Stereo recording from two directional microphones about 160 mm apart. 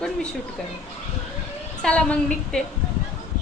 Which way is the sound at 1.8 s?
5° left (ahead or behind).